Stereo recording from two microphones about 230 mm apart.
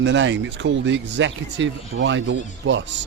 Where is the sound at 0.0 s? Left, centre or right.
Right.